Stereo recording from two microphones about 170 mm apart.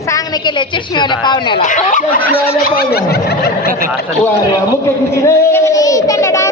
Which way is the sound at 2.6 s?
65° left (ahead or behind).